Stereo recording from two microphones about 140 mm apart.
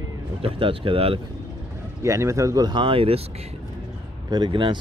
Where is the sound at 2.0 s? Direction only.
20° right (ahead or behind); by 3.2 s 40° right (ahead or behind).